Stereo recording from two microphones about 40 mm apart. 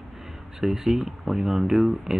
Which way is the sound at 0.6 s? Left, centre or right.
Centre.